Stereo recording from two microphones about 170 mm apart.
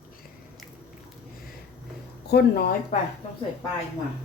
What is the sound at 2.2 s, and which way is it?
Speech, 75° left (ahead or behind).